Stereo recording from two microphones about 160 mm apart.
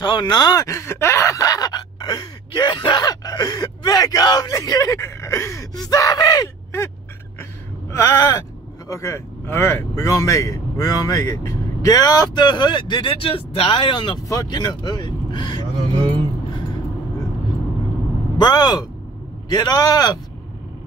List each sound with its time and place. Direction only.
0.0 s a sound: 30° left (ahead or behind)
7.9 s speech: 15° left (ahead or behind)
18.4 s speech: 25° left (ahead or behind)